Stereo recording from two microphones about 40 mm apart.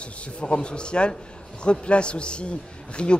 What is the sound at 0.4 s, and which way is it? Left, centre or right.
Speech, left.